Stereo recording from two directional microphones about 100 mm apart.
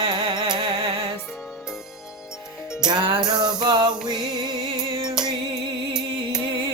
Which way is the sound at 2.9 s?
50° right (ahead or behind).